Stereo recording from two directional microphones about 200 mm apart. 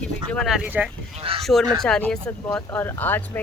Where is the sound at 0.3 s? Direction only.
Centre (ahead or behind).